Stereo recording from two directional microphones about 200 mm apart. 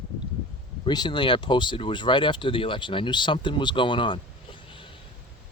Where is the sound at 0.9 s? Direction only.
20° left (ahead or behind).